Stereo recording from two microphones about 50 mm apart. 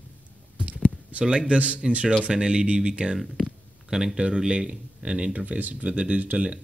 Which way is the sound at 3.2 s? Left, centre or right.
Centre.